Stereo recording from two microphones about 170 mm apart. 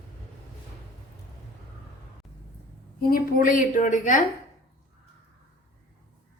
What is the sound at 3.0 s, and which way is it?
A woman's voice, 60° left (ahead or behind).